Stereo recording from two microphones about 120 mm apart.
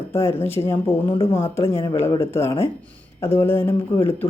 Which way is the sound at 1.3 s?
20° left (ahead or behind).